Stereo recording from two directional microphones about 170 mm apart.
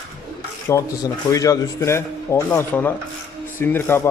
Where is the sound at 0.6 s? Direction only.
20° left (ahead or behind).